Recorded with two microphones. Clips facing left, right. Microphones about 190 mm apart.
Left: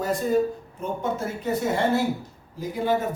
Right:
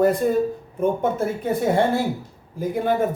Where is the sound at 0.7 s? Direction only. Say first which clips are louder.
Right 8 dB; 55° right (ahead or behind).